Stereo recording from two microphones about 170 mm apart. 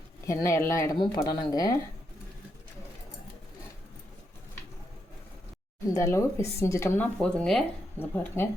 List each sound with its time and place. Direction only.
0.4 s speech: 15° left (ahead or behind)
5.9 s speech: 15° left (ahead or behind)